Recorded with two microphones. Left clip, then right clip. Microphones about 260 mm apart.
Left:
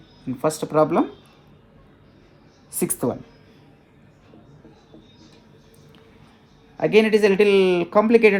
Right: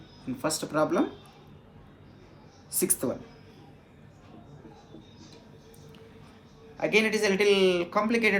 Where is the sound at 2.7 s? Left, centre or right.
Left.